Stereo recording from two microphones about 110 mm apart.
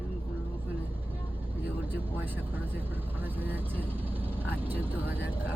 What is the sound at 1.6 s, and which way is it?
Speech, 15° right (ahead or behind).